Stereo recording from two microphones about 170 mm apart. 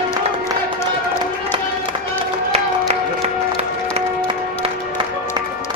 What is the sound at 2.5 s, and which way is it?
Music, 40° right (ahead or behind).